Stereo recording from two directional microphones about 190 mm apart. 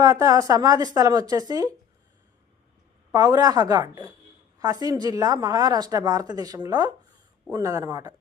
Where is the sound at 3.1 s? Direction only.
20° right (ahead or behind).